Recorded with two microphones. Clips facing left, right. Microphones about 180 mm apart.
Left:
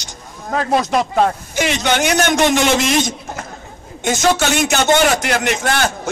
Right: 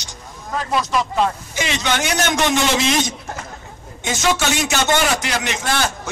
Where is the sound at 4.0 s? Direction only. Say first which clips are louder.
Left 4 dB; 50° left (ahead or behind).